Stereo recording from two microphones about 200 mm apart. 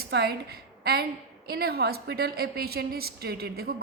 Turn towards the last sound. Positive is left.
turn(degrees=-50)  # may be behind; listen again after turning